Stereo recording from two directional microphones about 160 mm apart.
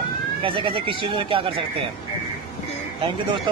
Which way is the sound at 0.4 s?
35° right (ahead or behind).